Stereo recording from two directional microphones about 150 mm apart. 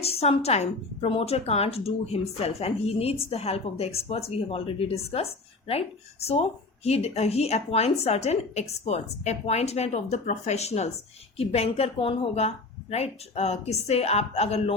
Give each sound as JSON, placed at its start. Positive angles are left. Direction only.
{"t": 0.0, "sound": "a woman's voice", "side_deg": 40}